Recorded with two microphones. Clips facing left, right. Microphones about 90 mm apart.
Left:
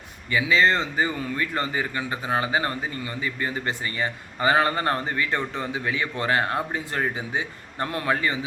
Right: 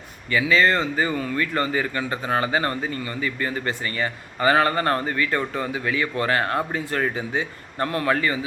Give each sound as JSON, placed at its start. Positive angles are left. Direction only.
{"t": 0.3, "sound": "speech", "side_deg": 20}